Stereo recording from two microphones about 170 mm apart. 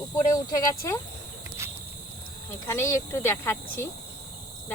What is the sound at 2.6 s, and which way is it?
Speech, 15° left (ahead or behind).